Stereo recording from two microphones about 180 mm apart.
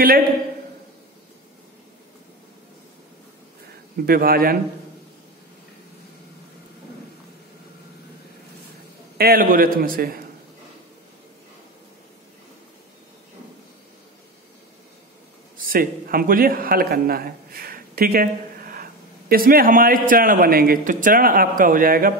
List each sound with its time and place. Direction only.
4.0 s a man's voice: 55° right (ahead or behind)
9.2 s a man's voice: 55° right (ahead or behind)
15.5 s a man's voice: 50° right (ahead or behind)